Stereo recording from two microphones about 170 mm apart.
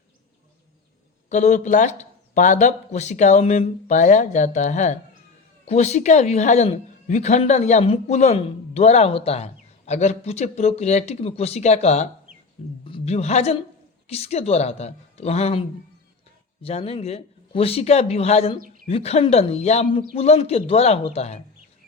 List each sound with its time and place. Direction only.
1.3 s a man's voice: 45° left (ahead or behind)
16.6 s speech: 35° left (ahead or behind)